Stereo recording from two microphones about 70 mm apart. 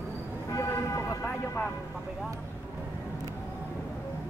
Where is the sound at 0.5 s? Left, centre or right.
Left.